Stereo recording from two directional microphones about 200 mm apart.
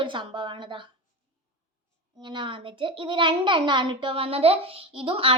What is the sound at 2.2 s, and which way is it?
A woman's voice, 25° right (ahead or behind).